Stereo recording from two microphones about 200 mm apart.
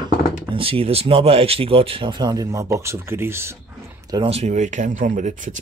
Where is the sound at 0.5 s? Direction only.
25° right (ahead or behind).